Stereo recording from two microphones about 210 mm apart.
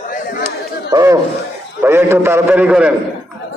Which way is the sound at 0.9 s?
15° right (ahead or behind).